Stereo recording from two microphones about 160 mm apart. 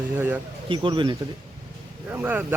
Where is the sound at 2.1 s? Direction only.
10° right (ahead or behind).